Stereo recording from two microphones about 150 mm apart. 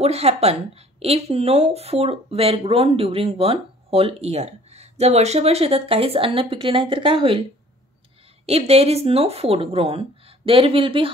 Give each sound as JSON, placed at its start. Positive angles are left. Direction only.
{"t": 0.0, "sound": "speech", "side_deg": -45}
{"t": 8.5, "sound": "speech", "side_deg": -45}